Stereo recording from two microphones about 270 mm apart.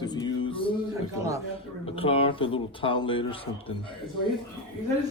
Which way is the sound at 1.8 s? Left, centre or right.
Left.